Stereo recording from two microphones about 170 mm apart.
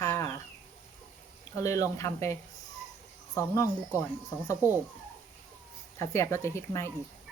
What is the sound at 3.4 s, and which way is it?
Speech, 15° left (ahead or behind).